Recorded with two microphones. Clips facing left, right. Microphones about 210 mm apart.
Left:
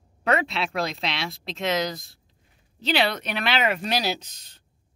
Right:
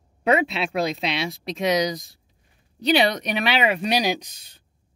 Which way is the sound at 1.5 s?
15° right (ahead or behind).